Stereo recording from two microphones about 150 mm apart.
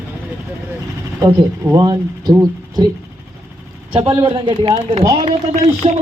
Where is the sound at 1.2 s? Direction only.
20° right (ahead or behind).